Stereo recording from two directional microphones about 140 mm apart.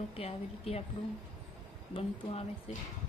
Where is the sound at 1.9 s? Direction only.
45° left (ahead or behind).